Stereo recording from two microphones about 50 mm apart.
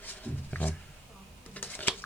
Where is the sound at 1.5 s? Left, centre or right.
Left.